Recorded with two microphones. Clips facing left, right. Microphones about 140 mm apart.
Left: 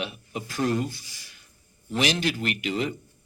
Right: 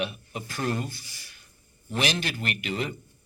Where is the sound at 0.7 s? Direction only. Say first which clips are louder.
Left 4 dB; 55° right (ahead or behind).